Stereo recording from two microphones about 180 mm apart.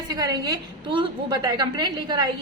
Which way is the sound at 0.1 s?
20° right (ahead or behind).